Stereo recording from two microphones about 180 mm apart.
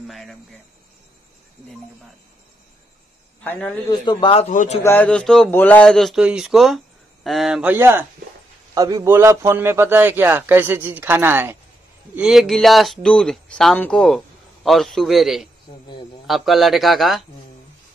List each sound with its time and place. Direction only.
0.0 s speech: centre (ahead or behind)
4.0 s a man's voice: 25° left (ahead or behind)
4.5 s a man's voice: 40° left (ahead or behind)
4.8 s a man's voice: 10° left (ahead or behind)